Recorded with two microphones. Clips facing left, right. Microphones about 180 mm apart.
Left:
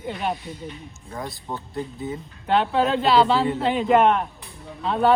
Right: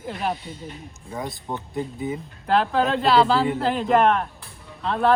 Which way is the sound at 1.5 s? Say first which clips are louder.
Right 2 dB; 15° right (ahead or behind).